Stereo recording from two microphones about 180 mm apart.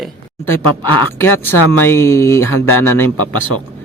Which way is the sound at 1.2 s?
10° left (ahead or behind).